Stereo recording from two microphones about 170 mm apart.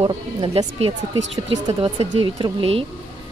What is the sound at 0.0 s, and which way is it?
Speech, 30° right (ahead or behind).